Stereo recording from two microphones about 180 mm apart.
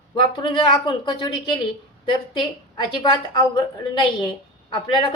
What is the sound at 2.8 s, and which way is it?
Speech, 25° left (ahead or behind).